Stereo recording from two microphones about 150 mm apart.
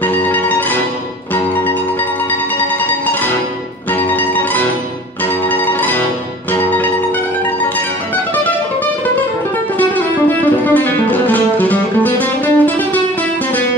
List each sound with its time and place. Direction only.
0.0 s music: 10° left (ahead or behind)
2.8 s music: 10° left (ahead or behind)
9.8 s music: 10° left (ahead or behind)